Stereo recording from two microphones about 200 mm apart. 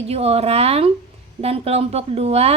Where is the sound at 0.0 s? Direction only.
30° right (ahead or behind).